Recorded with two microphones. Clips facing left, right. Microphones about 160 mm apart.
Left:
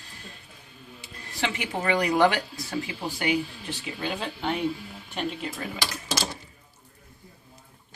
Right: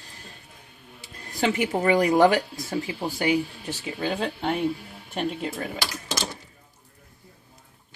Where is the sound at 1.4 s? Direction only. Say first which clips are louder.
Right 6 dB; 40° right (ahead or behind).